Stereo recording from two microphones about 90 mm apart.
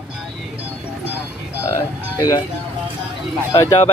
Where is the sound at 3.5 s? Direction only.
40° left (ahead or behind).